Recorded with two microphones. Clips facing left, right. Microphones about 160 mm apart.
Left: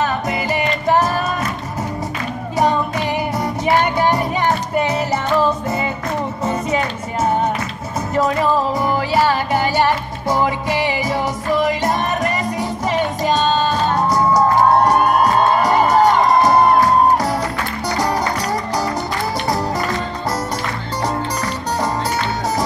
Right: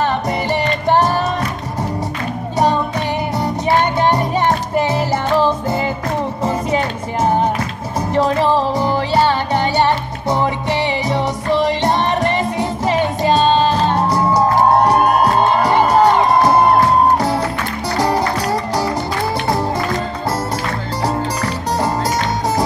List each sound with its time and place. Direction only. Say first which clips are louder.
4.7 s music: right 2 dB; 30° right (ahead or behind)
8.1 s music: right 2 dB; 30° right (ahead or behind)
13.3 s music: right 4 dB; 30° right (ahead or behind)
15.6 s music: right 1 dB; 30° right (ahead or behind)
17.9 s music: right 3 dB; 30° right (ahead or behind)